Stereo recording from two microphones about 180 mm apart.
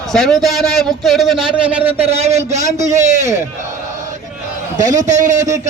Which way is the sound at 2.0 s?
35° right (ahead or behind).